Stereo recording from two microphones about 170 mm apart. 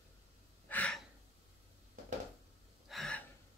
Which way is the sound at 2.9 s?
5° left (ahead or behind).